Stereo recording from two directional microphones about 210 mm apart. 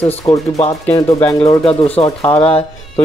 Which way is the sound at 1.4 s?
25° left (ahead or behind).